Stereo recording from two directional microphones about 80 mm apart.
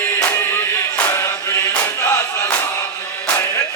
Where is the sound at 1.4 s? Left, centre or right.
Left.